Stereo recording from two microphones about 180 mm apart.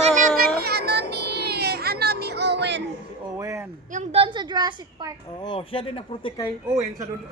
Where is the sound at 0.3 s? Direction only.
65° right (ahead or behind).